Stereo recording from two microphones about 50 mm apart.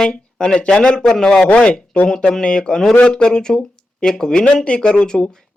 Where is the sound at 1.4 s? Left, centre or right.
Left.